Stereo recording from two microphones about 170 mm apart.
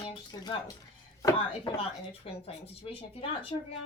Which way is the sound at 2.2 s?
35° left (ahead or behind).